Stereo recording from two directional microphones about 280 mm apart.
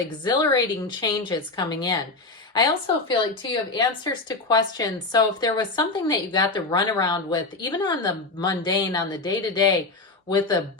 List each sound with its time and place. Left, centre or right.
0.3 s speech: centre